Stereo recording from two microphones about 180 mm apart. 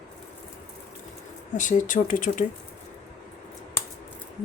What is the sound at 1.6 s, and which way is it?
Speech, 45° left (ahead or behind).